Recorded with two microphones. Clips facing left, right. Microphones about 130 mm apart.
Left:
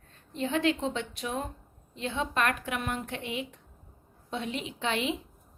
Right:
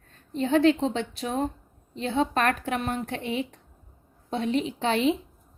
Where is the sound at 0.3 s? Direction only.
35° right (ahead or behind).